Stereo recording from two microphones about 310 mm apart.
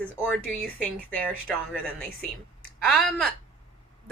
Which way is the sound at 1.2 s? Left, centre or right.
Centre.